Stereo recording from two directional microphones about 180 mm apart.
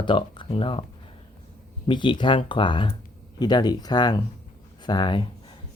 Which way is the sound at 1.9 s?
25° left (ahead or behind).